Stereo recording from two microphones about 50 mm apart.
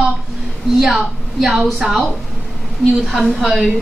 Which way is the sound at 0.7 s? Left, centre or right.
Centre.